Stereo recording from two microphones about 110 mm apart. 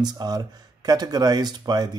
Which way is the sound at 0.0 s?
40° right (ahead or behind).